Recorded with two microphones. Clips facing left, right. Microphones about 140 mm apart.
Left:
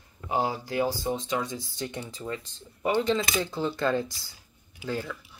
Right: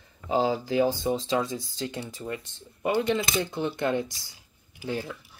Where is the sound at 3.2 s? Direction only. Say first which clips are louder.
Even; 25° right (ahead or behind).